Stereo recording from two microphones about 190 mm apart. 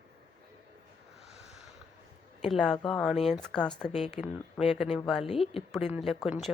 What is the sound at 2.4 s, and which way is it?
Speech, centre (ahead or behind).